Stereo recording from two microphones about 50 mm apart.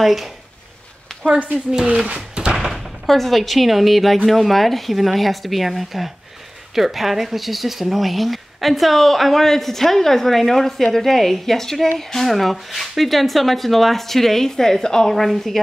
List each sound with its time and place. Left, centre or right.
0.0 s speech: centre
1.9 s speech: right
2.7 s speech: centre